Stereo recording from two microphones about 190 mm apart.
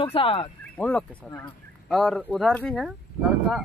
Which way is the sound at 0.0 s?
30° left (ahead or behind).